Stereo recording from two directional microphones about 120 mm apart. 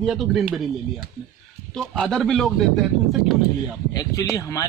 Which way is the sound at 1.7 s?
5° left (ahead or behind).